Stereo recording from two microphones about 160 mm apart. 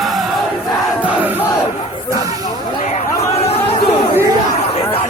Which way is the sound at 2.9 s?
40° left (ahead or behind).